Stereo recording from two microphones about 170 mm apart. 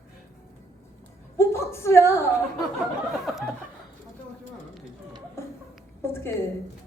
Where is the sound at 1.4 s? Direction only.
15° left (ahead or behind).